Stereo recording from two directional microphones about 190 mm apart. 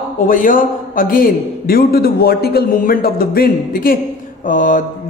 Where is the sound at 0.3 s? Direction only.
45° left (ahead or behind).